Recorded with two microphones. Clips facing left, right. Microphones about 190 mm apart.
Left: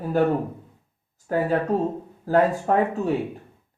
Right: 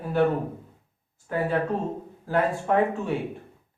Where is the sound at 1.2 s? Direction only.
40° left (ahead or behind).